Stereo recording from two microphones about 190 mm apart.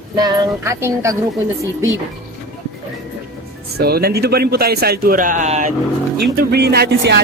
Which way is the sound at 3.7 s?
55° right (ahead or behind).